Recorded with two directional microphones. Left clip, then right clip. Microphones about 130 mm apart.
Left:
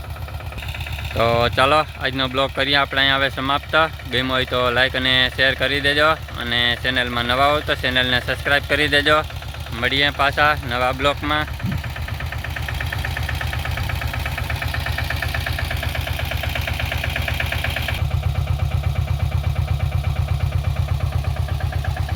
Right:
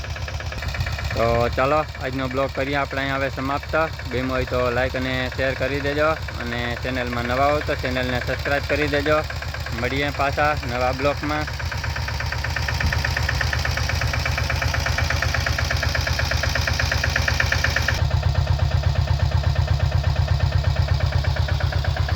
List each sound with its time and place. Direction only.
1.1 s speech: 5° left (ahead or behind)
12.5 s engine: 90° right